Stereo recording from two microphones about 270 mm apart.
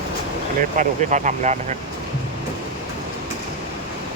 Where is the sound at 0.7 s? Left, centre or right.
Right.